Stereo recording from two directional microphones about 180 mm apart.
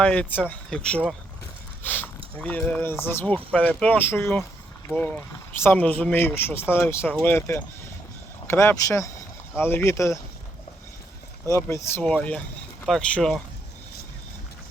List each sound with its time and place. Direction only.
0.0 s speech: 10° left (ahead or behind)
11.4 s speech: 15° left (ahead or behind)